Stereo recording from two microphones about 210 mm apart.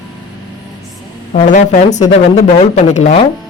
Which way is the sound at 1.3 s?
35° left (ahead or behind).